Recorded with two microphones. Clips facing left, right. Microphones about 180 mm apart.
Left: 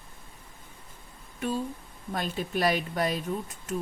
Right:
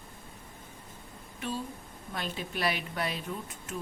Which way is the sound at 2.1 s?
40° left (ahead or behind).